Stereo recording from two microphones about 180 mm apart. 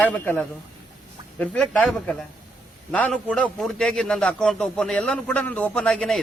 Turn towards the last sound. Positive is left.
turn(degrees=5)  # may be behind; listen again after turning